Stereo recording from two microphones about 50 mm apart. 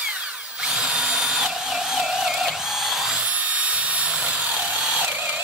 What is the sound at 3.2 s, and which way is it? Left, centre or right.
Drill, right.